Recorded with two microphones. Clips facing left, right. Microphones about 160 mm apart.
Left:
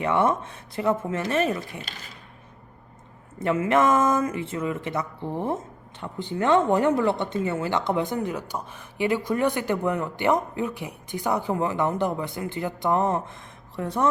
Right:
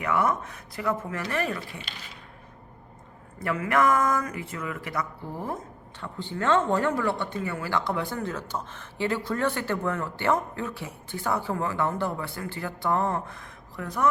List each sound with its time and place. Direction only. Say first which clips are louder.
0.0 s speech: left 3 dB; 25° left (ahead or behind)
3.4 s speech: left 3 dB; 25° left (ahead or behind)